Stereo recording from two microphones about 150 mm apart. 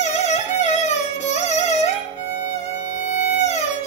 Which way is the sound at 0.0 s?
50° left (ahead or behind).